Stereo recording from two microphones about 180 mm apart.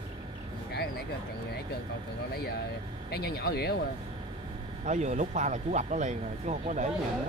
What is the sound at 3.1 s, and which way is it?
Speech, 65° left (ahead or behind).